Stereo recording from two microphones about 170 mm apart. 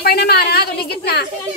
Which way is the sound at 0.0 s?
70° left (ahead or behind).